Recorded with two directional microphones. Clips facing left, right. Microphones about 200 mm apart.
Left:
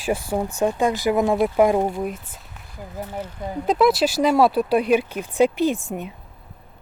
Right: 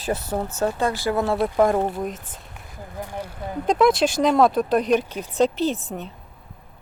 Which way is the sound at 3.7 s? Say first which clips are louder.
Even; 5° left (ahead or behind).